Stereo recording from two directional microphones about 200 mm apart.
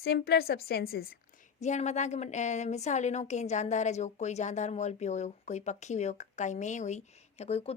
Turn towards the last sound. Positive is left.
turn(degrees=30)  # may be behind; listen again after turning